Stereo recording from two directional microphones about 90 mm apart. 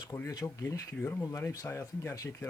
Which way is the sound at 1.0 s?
25° left (ahead or behind).